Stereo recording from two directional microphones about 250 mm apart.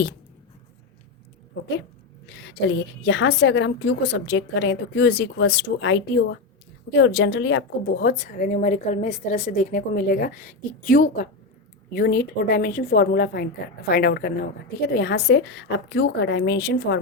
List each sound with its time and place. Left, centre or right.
2.4 s a woman's voice: left